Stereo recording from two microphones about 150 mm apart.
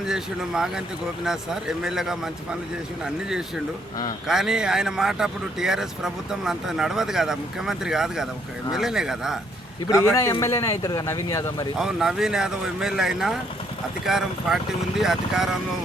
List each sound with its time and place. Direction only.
0.0 s speech: 5° right (ahead or behind)
9.8 s speech: 20° left (ahead or behind)
11.8 s speech: 5° right (ahead or behind)